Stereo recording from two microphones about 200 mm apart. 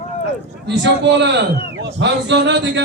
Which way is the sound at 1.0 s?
60° right (ahead or behind).